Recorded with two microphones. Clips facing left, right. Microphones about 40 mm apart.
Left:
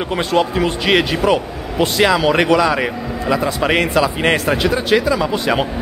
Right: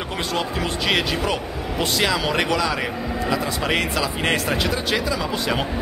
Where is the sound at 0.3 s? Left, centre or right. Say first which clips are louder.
Left 9 dB; centre.